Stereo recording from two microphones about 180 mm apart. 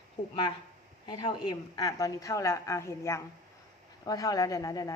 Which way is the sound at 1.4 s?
20° left (ahead or behind).